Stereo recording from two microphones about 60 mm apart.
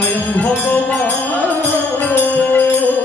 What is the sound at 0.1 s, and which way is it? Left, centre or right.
Music, left.